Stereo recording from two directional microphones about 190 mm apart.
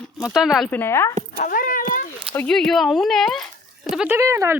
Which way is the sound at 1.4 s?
45° left (ahead or behind).